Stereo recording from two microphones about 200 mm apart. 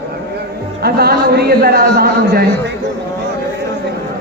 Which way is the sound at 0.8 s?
50° right (ahead or behind).